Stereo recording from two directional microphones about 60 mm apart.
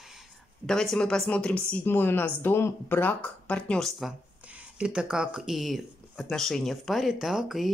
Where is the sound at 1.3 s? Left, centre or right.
Left.